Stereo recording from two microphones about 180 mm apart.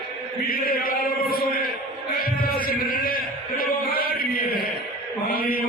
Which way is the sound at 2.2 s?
55° left (ahead or behind).